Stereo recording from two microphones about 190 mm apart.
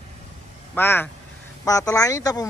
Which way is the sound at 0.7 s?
10° left (ahead or behind).